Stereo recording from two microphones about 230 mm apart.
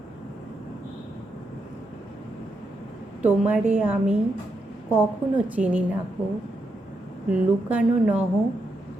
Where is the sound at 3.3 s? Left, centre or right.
Centre.